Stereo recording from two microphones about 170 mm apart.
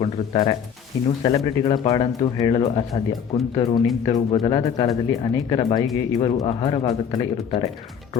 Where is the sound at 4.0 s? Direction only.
25° left (ahead or behind).